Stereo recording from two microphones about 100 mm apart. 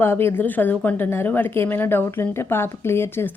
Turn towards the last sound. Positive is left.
turn(degrees=25)  # may be behind; listen again after turning